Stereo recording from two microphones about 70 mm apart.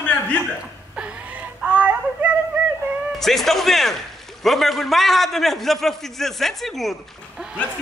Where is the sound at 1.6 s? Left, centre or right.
Right.